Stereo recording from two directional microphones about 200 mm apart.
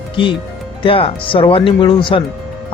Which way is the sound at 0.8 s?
25° left (ahead or behind).